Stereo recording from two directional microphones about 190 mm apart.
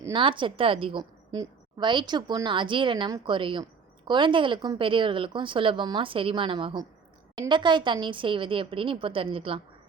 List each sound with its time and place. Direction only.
0.1 s a woman's voice: 25° right (ahead or behind)